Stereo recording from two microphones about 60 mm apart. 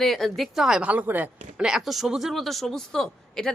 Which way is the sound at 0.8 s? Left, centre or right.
Right.